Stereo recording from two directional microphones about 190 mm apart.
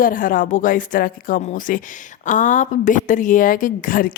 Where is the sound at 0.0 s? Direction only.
45° left (ahead or behind).